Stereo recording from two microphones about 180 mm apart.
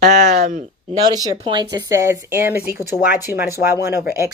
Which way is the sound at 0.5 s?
40° right (ahead or behind).